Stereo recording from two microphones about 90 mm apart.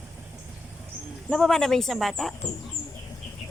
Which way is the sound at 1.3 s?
5° left (ahead or behind).